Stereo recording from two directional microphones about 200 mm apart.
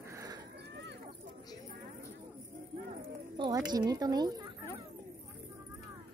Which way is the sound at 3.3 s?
25° right (ahead or behind).